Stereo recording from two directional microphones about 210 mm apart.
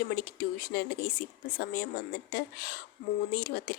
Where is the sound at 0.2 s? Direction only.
45° left (ahead or behind).